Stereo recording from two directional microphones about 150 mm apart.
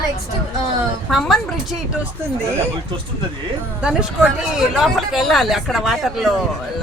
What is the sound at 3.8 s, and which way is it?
Speech, 10° right (ahead or behind).